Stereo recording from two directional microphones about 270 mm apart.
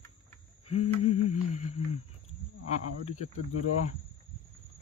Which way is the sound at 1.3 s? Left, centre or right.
Left.